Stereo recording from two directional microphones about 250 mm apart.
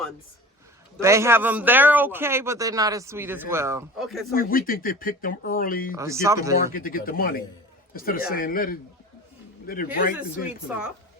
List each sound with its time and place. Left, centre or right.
0.9 s a man's voice: centre
3.9 s speech: centre
4.4 s speech: left
6.0 s a man's voice: centre
6.7 s speech: left